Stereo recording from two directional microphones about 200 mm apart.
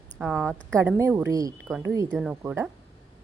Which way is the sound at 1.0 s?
15° right (ahead or behind).